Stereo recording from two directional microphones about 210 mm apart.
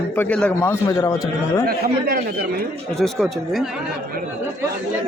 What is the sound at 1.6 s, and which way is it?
Speech, 45° right (ahead or behind).